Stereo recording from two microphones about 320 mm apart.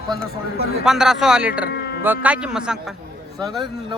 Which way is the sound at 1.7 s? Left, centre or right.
Left.